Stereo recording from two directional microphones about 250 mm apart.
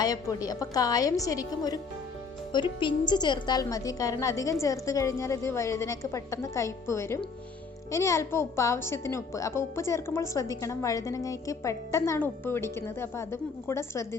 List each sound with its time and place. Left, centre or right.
0.0 s a woman's voice: centre